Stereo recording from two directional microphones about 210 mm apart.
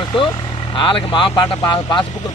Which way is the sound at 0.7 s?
25° left (ahead or behind).